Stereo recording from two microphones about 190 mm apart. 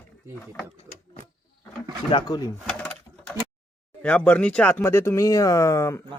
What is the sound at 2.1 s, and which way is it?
Speech, 20° left (ahead or behind).